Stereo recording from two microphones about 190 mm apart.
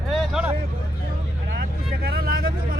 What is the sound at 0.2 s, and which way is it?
Vehicle, 5° right (ahead or behind).